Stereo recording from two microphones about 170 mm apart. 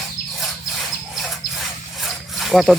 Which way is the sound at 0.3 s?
Centre (ahead or behind).